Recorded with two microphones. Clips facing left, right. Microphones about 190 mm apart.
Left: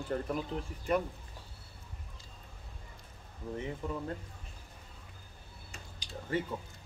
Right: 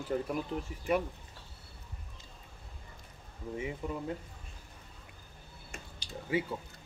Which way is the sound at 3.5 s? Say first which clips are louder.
Right 1 dB; 10° right (ahead or behind).